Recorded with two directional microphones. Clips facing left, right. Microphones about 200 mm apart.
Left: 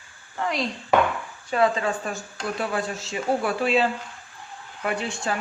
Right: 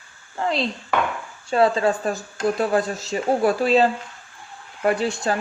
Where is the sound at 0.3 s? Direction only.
30° right (ahead or behind).